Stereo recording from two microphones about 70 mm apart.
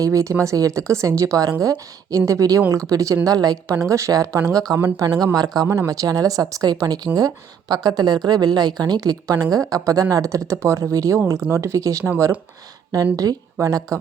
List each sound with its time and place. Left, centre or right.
0.0 s speech: right
3.2 s a woman's voice: right
3.8 s speech: right
4.5 s a woman's voice: right
5.6 s a woman's voice: right
13.1 s a woman's voice: right